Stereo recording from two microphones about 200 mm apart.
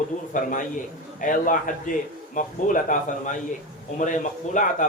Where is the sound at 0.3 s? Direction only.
40° left (ahead or behind).